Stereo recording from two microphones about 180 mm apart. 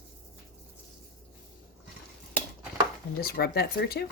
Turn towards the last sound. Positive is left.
turn(degrees=60)  # may be behind; listen again after turning